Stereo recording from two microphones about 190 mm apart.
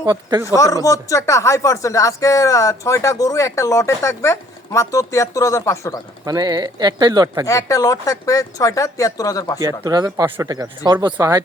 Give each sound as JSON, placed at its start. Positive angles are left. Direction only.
{"t": 0.0, "sound": "speech", "side_deg": -20}
{"t": 0.4, "sound": "speech", "side_deg": 15}
{"t": 6.2, "sound": "speech", "side_deg": -20}
{"t": 7.4, "sound": "speech", "side_deg": 15}
{"t": 9.6, "sound": "speech", "side_deg": -20}